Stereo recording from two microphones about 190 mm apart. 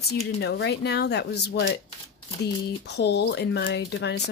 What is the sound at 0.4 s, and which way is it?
Speech, 60° left (ahead or behind).